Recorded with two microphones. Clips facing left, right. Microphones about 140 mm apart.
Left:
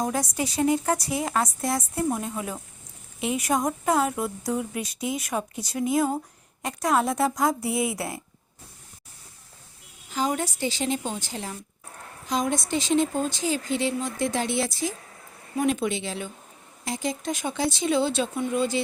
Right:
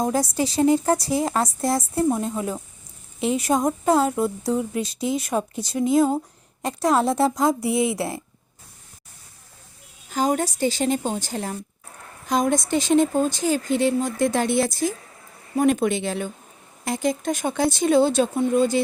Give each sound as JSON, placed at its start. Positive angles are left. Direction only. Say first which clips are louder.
{"t": 0.0, "sound": "speech", "louder": "right 5 dB", "side_deg": -30}
{"t": 3.2, "sound": "speech", "louder": "right 4 dB", "side_deg": -30}
{"t": 10.1, "sound": "speech", "louder": "right 4 dB", "side_deg": -45}